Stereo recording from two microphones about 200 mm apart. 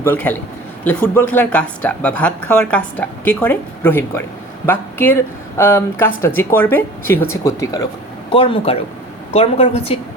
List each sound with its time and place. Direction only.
0.0 s speech: 10° left (ahead or behind)
8.3 s a woman's voice: 25° left (ahead or behind)